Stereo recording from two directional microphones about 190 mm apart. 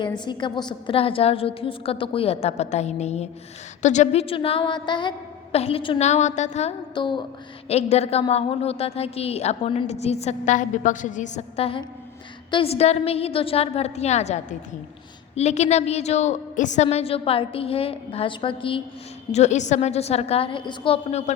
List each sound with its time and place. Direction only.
0.0 s a woman's voice: 25° left (ahead or behind)